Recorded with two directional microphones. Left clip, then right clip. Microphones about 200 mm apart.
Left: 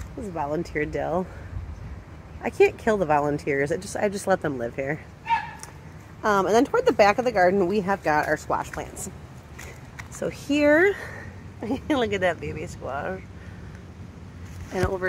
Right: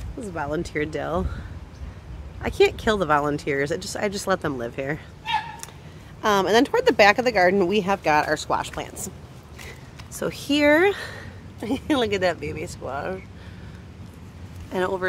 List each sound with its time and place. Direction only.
0.4 s speech: 5° right (ahead or behind)
2.4 s speech: 5° right (ahead or behind)
6.2 s speech: 5° right (ahead or behind)
10.1 s speech: 20° right (ahead or behind)
11.6 s speech: 20° right (ahead or behind)
14.7 s speech: 25° right (ahead or behind)